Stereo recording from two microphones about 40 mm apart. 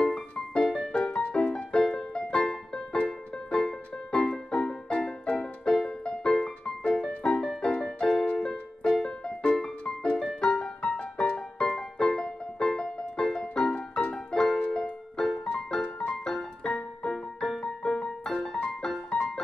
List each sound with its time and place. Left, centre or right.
0.0 s music: centre
4.5 s music: left
5.8 s music: centre